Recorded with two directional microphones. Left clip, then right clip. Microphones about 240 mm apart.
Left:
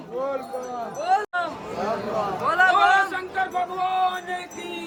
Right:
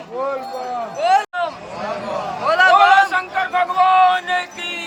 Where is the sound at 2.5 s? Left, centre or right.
Centre.